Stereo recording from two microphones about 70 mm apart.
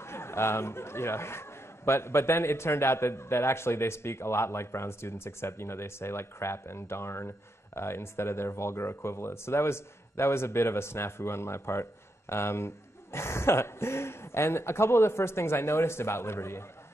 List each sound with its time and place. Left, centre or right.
0.0 s a man's voice: left